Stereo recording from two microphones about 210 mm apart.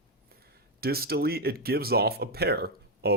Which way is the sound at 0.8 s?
45° right (ahead or behind).